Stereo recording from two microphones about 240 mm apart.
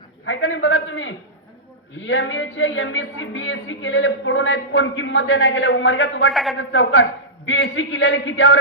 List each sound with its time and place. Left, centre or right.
0.3 s a sound: left
2.0 s speech: left
6.3 s a man's voice: centre
6.6 s speech: left